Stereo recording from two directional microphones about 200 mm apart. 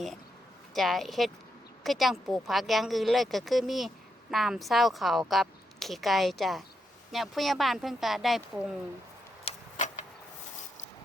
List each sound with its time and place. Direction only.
0.7 s speech: centre (ahead or behind)
9.4 s tick-tock: 35° left (ahead or behind)